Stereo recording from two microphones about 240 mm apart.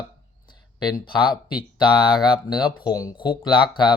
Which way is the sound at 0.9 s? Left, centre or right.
Centre.